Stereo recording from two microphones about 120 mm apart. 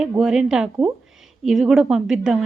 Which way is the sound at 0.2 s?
5° right (ahead or behind).